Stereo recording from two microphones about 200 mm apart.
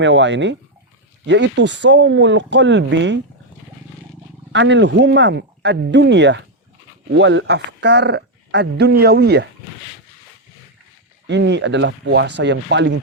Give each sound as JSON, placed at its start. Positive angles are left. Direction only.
{"t": 0.0, "sound": "speech", "side_deg": -65}
{"t": 4.5, "sound": "speech", "side_deg": -60}
{"t": 11.3, "sound": "speech", "side_deg": -60}